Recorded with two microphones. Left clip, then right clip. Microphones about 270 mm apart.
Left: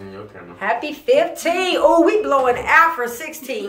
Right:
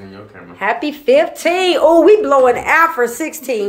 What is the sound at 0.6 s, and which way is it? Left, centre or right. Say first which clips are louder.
Speech: right 4 dB; right.